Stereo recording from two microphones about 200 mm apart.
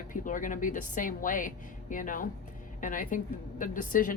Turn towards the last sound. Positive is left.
turn(degrees=40)  # may be behind; listen again after turning